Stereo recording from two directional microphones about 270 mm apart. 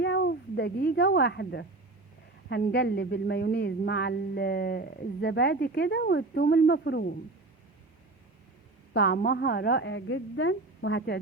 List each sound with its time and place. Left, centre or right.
0.0 s speech: left
8.9 s speech: left